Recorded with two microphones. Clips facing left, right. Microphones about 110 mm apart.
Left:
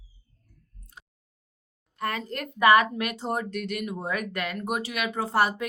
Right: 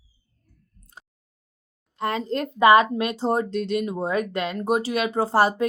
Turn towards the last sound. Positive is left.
turn(degrees=-30)  # may be behind; listen again after turning